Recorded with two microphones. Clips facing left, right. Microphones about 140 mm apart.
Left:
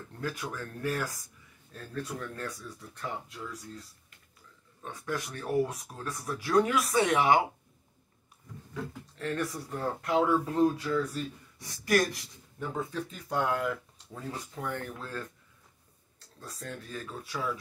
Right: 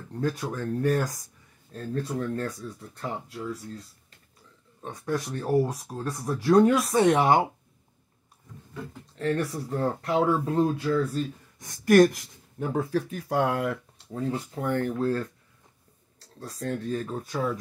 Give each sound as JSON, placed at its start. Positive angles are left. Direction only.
{"t": 0.2, "sound": "speech", "side_deg": -35}
{"t": 4.8, "sound": "speech", "side_deg": -35}
{"t": 9.1, "sound": "speech", "side_deg": -35}
{"t": 11.6, "sound": "speech", "side_deg": -50}
{"t": 12.6, "sound": "speech", "side_deg": -70}
{"t": 14.1, "sound": "speech", "side_deg": -35}
{"t": 16.6, "sound": "speech", "side_deg": -35}